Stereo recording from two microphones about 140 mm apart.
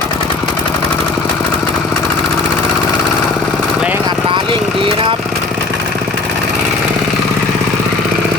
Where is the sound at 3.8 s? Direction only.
10° right (ahead or behind).